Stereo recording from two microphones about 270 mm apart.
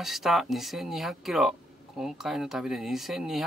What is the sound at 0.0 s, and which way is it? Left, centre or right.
Speech, centre.